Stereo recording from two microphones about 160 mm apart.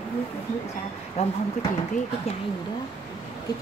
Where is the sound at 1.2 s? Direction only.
40° left (ahead or behind).